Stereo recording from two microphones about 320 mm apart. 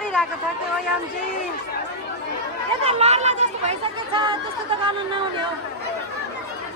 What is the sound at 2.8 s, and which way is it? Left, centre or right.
Speech, centre.